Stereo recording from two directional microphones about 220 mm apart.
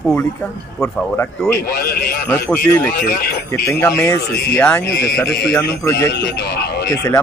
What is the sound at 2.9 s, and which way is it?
Speech, 45° left (ahead or behind).